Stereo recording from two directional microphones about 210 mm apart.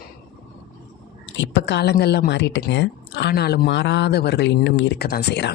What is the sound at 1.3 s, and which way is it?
Speech, 60° left (ahead or behind).